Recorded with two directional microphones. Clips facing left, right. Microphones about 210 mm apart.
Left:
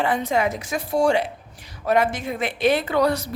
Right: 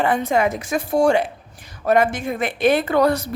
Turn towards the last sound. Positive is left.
turn(degrees=-50)  # may be behind; listen again after turning